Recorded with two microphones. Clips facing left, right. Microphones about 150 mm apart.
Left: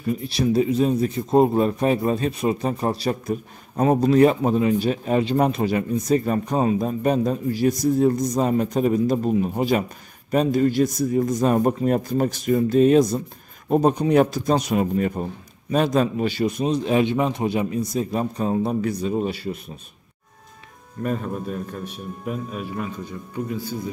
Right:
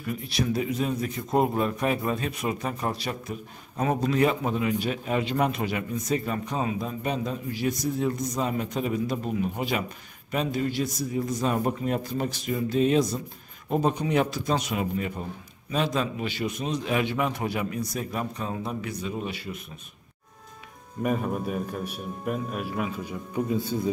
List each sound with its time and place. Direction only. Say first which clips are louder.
0.0 s a man's voice: left 6 dB; 30° left (ahead or behind)
21.0 s a man's voice: left 1 dB; 10° right (ahead or behind)
23.5 s a man's voice: right 3 dB; 25° right (ahead or behind)